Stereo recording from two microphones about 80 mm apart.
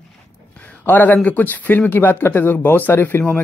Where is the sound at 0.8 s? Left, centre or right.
Left.